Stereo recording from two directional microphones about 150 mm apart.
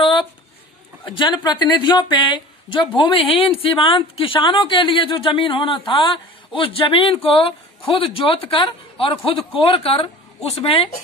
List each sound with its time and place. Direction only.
1.0 s speech: 30° left (ahead or behind)